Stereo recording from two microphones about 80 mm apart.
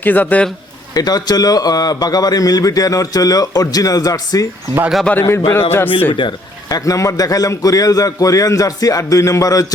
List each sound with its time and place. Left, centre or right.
0.0 s speech: left
0.9 s a man's voice: left
5.3 s a man's voice: left
6.1 s speech: left
6.7 s a man's voice: left